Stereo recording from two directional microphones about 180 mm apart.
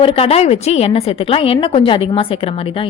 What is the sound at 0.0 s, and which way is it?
A woman's voice, 30° left (ahead or behind).